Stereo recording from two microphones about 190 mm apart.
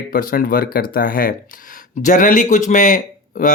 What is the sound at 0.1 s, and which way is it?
Speech, 50° left (ahead or behind).